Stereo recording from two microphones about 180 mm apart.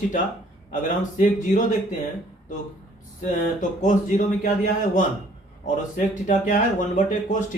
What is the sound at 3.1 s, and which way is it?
Speech, 45° left (ahead or behind).